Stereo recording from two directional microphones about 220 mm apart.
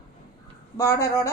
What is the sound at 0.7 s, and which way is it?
Speech, 15° left (ahead or behind).